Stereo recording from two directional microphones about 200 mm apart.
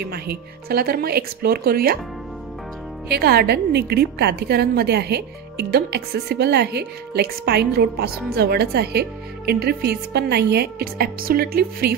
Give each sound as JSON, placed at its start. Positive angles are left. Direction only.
{"t": 0.0, "sound": "a woman's voice", "side_deg": -50}
{"t": 3.1, "sound": "a woman's voice", "side_deg": -55}